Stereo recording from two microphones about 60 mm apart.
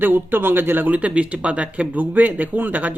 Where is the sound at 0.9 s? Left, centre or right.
Right.